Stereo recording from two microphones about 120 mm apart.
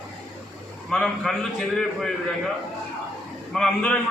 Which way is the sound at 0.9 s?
10° left (ahead or behind).